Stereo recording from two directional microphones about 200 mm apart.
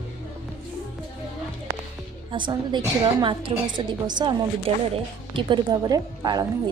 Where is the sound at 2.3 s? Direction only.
20° right (ahead or behind).